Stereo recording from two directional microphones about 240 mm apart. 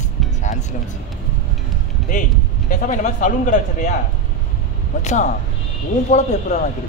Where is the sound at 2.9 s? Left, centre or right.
Left.